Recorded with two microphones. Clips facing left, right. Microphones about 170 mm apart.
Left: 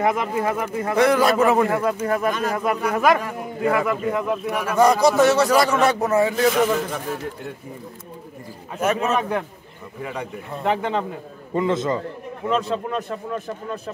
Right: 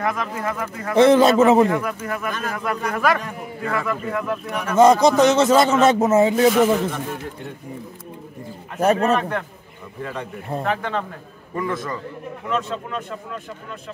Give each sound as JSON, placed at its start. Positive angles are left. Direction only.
{"t": 0.0, "sound": "speech", "side_deg": 25}
{"t": 0.9, "sound": "a man's voice", "side_deg": -25}
{"t": 1.7, "sound": "speech", "side_deg": 25}
{"t": 5.0, "sound": "a man's voice", "side_deg": -20}
{"t": 6.9, "sound": "a man's voice", "side_deg": 0}
{"t": 8.8, "sound": "speech", "side_deg": -35}
{"t": 10.6, "sound": "speech", "side_deg": 20}
{"t": 12.4, "sound": "a man's voice", "side_deg": 35}